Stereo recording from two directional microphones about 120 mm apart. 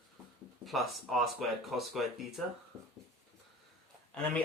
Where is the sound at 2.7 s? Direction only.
30° right (ahead or behind).